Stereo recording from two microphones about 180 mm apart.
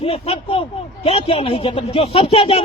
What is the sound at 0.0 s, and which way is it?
Speech, 30° left (ahead or behind).